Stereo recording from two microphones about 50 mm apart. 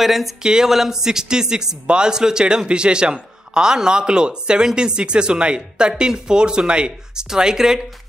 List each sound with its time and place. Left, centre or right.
0.0 s speech: centre
0.4 s a man's voice: centre